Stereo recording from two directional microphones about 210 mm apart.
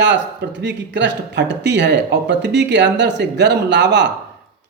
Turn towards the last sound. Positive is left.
turn(degrees=-55)  # may be behind; listen again after turning